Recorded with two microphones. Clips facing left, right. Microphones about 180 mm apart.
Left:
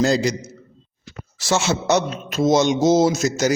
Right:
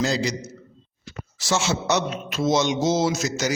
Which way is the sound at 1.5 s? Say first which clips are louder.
Left 4 dB; 60° left (ahead or behind).